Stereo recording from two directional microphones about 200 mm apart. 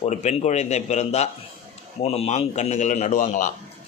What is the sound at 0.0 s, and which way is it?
A man's voice, 35° left (ahead or behind).